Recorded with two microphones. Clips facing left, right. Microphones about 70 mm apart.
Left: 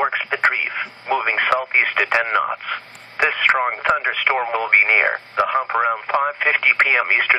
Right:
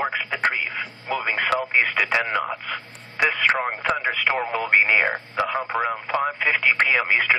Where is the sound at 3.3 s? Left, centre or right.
Left.